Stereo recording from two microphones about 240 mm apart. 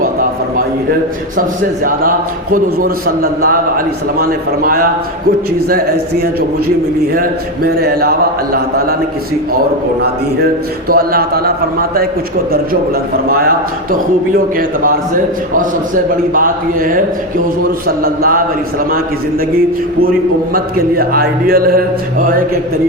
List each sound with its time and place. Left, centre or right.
1.8 s a man's voice: right
10.8 s a man's voice: right
14.3 s a man's voice: right
20.0 s a man's voice: right